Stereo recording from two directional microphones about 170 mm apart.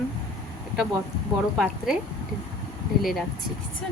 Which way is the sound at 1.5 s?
Centre (ahead or behind).